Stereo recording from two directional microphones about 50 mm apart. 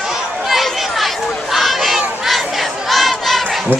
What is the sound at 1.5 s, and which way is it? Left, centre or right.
Crowd, centre.